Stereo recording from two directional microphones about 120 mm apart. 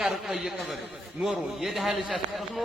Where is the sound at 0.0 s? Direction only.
Centre (ahead or behind).